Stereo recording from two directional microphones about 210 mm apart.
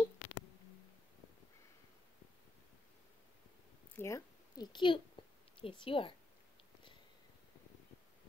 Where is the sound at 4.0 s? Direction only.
15° left (ahead or behind).